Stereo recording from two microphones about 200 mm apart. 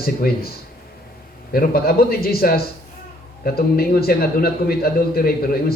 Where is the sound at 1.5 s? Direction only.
50° left (ahead or behind).